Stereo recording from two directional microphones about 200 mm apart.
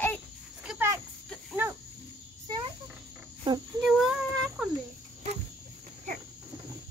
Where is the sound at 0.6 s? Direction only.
10° right (ahead or behind).